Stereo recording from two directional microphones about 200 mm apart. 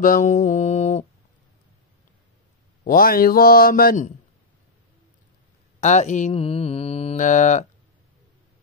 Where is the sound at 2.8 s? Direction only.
45° left (ahead or behind).